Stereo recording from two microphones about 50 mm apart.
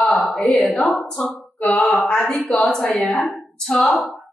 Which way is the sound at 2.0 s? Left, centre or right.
Centre.